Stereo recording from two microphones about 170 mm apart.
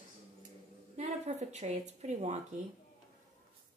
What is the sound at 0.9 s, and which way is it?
Speech, 40° right (ahead or behind).